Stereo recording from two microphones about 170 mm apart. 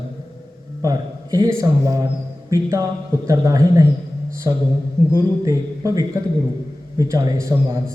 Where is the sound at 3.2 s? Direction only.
20° right (ahead or behind).